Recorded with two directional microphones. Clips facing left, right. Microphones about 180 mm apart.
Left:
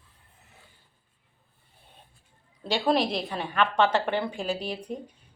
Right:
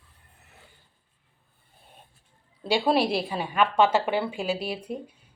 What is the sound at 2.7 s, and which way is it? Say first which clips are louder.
A woman's voice: right 2 dB; 10° right (ahead or behind).